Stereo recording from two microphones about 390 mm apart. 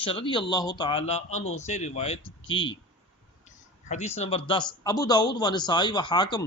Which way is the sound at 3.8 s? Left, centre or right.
Centre.